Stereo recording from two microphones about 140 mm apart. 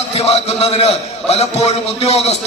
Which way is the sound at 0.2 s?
45° left (ahead or behind).